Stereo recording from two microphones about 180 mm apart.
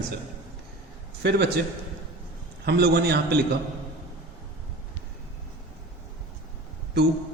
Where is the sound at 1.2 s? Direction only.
70° right (ahead or behind).